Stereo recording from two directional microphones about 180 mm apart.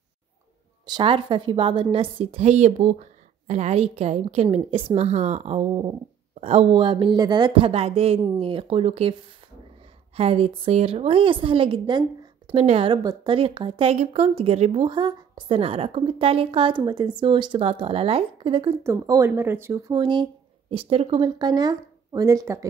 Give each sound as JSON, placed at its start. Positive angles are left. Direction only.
{"t": 0.8, "sound": "a woman's voice", "side_deg": -25}
{"t": 10.1, "sound": "a woman's voice", "side_deg": -35}
{"t": 19.9, "sound": "speech", "side_deg": -25}